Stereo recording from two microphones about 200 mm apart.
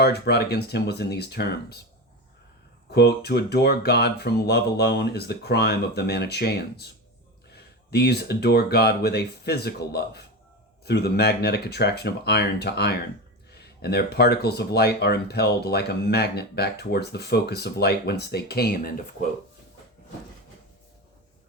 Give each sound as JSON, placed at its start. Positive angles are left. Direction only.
{"t": 0.0, "sound": "speech", "side_deg": 55}
{"t": 3.2, "sound": "speech", "side_deg": 55}